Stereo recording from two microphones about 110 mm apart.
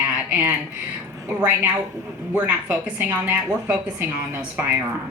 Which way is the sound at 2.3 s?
10° right (ahead or behind).